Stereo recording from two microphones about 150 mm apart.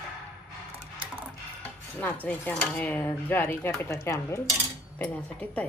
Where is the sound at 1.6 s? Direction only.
10° left (ahead or behind).